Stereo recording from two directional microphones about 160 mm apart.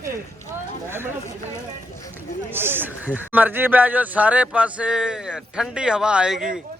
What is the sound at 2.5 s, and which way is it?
A man's voice, 15° right (ahead or behind).